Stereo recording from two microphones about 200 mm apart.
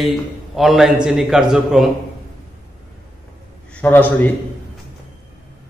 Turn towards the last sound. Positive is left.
turn(degrees=10)  # may be behind; listen again after turning